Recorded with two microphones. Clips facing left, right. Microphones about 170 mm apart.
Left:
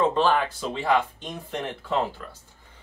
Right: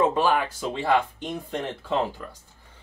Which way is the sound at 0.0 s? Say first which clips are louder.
Even; 10° right (ahead or behind).